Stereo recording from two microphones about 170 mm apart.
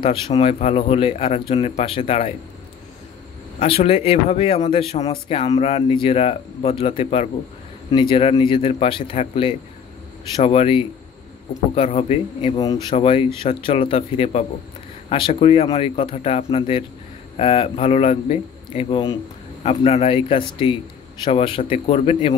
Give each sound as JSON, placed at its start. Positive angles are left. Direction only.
{"t": 0.0, "sound": "speech", "side_deg": 30}
{"t": 3.5, "sound": "speech", "side_deg": 35}